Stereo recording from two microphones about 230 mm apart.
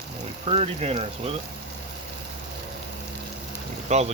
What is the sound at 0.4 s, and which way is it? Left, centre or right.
Speech, right.